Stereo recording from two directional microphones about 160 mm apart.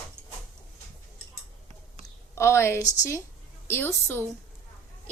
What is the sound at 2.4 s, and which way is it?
A woman's voice, 15° left (ahead or behind).